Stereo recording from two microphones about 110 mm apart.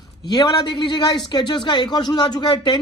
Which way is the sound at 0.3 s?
35° left (ahead or behind).